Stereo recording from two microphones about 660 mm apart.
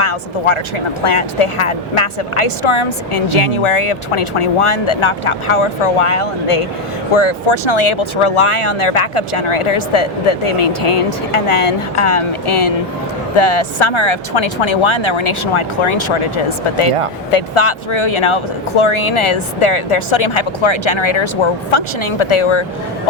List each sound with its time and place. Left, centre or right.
0.0 s speech: left